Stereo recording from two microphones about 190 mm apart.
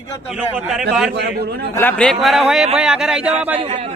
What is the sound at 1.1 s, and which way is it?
Speech, 60° right (ahead or behind).